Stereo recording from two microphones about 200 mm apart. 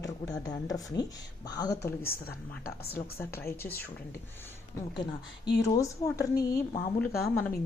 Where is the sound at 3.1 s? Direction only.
10° left (ahead or behind).